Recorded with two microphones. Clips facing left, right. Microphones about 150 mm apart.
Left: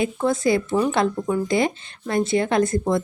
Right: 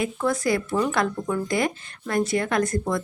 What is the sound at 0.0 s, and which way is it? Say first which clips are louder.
Speech: left 3 dB; 25° left (ahead or behind).